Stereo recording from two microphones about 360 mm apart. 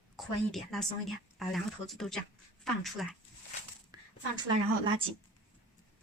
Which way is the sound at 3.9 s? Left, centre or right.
Centre.